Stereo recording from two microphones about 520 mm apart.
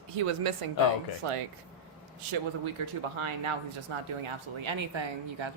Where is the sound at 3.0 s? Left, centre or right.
Right.